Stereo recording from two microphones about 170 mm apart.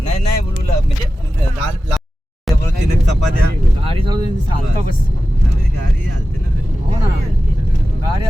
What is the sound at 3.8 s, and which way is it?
Speech, 30° right (ahead or behind).